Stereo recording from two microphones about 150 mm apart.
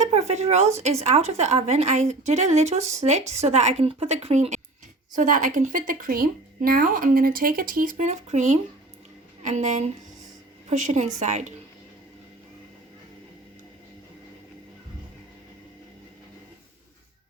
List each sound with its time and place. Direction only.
0.0 s speech: 45° right (ahead or behind)